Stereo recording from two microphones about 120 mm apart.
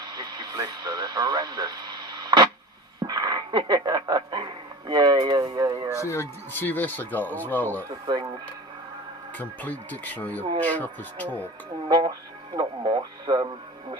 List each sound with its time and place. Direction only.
0.0 s radio: 35° right (ahead or behind)
3.0 s a sound: 35° right (ahead or behind)
6.1 s speech: 20° left (ahead or behind)
7.9 s speech: 40° right (ahead or behind)
9.4 s speech: 15° left (ahead or behind)
11.9 s speech: 35° right (ahead or behind)